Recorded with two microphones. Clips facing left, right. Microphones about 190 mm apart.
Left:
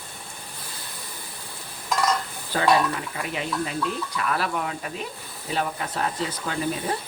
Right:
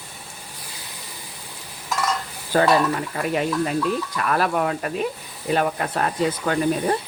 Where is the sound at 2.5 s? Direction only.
50° right (ahead or behind).